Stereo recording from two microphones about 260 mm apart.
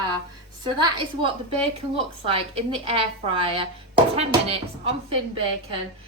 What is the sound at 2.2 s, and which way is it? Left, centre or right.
A woman's voice, right.